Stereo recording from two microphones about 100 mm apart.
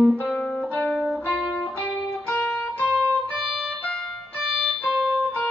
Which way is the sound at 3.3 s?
10° right (ahead or behind).